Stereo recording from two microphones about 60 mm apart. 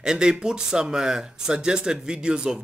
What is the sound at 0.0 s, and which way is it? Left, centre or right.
Speech, centre.